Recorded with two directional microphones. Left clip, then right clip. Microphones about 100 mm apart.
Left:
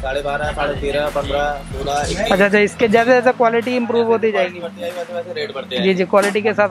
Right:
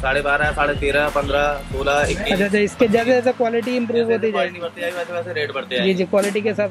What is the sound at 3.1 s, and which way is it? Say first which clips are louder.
Speech: left 4 dB; 20° left (ahead or behind).